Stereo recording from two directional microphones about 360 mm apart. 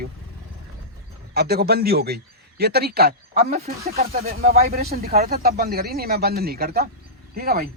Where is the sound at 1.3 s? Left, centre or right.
Right.